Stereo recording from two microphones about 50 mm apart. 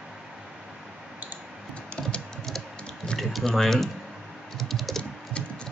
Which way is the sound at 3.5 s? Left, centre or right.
Centre.